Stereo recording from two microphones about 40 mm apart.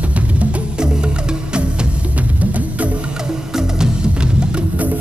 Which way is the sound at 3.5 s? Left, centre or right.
Centre.